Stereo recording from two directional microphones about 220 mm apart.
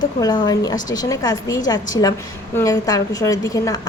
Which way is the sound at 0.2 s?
15° left (ahead or behind).